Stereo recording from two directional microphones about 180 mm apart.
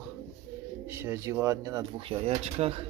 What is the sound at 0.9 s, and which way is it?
Speech, 15° right (ahead or behind).